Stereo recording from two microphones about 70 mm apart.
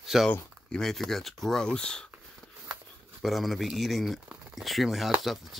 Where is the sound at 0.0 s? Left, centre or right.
Centre.